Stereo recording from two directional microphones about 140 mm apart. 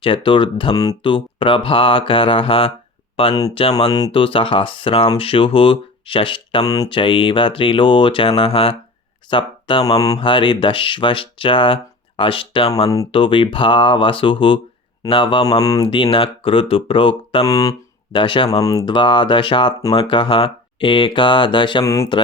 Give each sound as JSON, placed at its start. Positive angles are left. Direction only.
{"t": 0.0, "sound": "speech", "side_deg": 40}
{"t": 6.9, "sound": "speech", "side_deg": 40}
{"t": 15.4, "sound": "speech", "side_deg": 25}
{"t": 15.8, "sound": "speech", "side_deg": 40}
{"t": 17.4, "sound": "speech", "side_deg": 25}
{"t": 18.6, "sound": "speech", "side_deg": 25}
{"t": 18.9, "sound": "speech", "side_deg": 35}
{"t": 21.8, "sound": "speech", "side_deg": 20}